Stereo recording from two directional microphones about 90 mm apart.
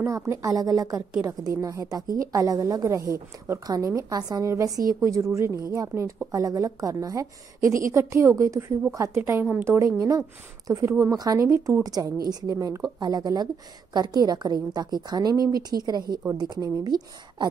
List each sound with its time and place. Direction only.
0.0 s a woman's voice: 35° right (ahead or behind)
9.2 s a woman's voice: 20° right (ahead or behind)
9.8 s a woman's voice: 35° right (ahead or behind)
11.1 s a woman's voice: 40° right (ahead or behind)